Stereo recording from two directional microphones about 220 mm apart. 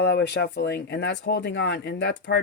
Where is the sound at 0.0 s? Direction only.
50° left (ahead or behind).